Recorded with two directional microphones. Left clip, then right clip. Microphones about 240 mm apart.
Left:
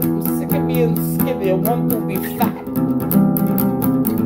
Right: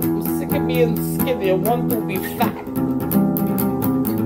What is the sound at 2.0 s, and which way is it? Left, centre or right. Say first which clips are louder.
Speech: left 1 dB; left.